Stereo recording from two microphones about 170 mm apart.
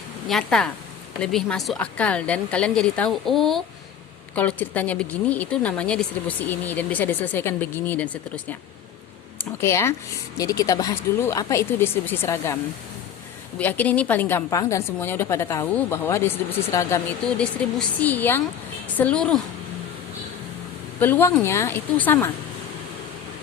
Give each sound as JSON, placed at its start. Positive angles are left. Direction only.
{"t": 0.3, "sound": "a woman's voice", "side_deg": 5}
{"t": 9.6, "sound": "a woman's voice", "side_deg": 15}
{"t": 13.6, "sound": "a woman's voice", "side_deg": 10}
{"t": 17.2, "sound": "a woman's voice", "side_deg": 5}
{"t": 21.0, "sound": "a woman's voice", "side_deg": 10}